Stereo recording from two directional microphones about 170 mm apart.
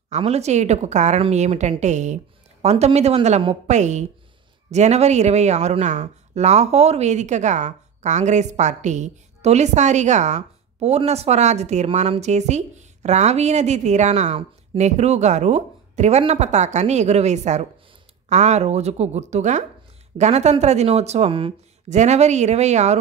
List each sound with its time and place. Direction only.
0.1 s speech: 40° right (ahead or behind)